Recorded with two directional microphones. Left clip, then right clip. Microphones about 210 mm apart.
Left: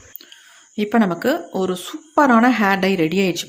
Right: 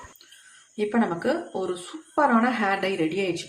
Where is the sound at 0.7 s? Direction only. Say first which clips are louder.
Left 6 dB; 50° left (ahead or behind).